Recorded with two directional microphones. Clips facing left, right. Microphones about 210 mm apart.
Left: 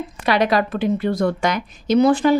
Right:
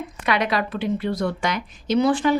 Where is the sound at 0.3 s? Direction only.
35° left (ahead or behind).